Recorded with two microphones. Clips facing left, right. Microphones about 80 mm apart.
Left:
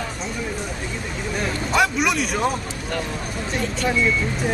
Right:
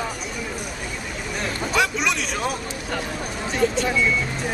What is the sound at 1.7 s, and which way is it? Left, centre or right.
Speech, centre.